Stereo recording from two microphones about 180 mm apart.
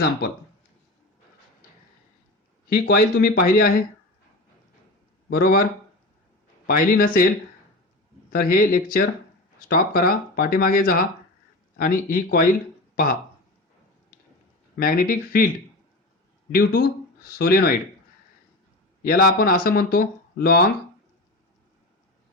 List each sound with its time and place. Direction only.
2.6 s speech: 55° left (ahead or behind)
5.3 s speech: 60° left (ahead or behind)
6.7 s speech: 55° left (ahead or behind)
8.3 s speech: 55° left (ahead or behind)
14.8 s speech: 55° left (ahead or behind)
16.5 s speech: 55° left (ahead or behind)
19.0 s speech: 55° left (ahead or behind)